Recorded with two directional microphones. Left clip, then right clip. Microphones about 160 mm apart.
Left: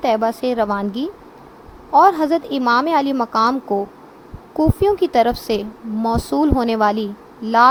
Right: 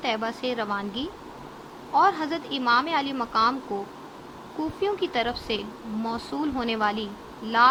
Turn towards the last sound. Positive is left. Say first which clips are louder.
# left 7 dB
turn(degrees=75)  # may be behind; listen again after turning